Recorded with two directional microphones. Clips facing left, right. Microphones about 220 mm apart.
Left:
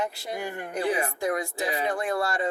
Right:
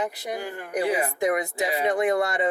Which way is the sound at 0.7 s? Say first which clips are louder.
Right 3 dB; 20° right (ahead or behind).